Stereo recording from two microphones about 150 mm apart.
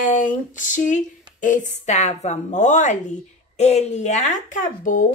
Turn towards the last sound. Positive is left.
turn(degrees=60)  # may be behind; listen again after turning